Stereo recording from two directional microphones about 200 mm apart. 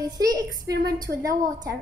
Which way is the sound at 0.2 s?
20° right (ahead or behind).